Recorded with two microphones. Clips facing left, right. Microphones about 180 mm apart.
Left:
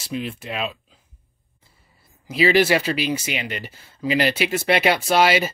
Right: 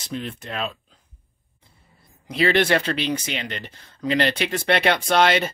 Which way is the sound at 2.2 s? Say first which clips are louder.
Left 2 dB; 5° left (ahead or behind).